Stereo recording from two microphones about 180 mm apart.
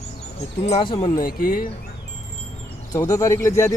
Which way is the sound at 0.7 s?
30° left (ahead or behind).